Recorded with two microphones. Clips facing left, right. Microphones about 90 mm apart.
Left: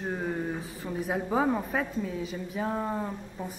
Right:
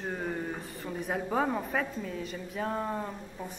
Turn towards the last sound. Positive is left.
turn(degrees=5)  # may be behind; listen again after turning